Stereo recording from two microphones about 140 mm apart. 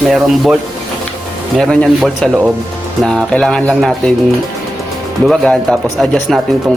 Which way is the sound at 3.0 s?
5° left (ahead or behind).